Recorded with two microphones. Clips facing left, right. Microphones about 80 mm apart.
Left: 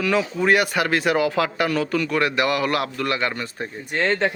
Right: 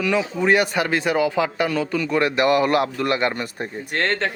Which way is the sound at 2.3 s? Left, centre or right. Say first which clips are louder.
Right 4 dB; right.